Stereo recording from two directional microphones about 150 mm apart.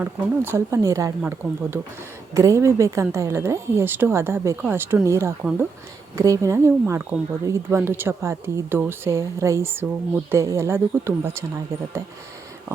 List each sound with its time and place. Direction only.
0.0 s a woman's voice: 15° right (ahead or behind)
5.4 s speech: 10° right (ahead or behind)
6.1 s speech: 20° right (ahead or behind)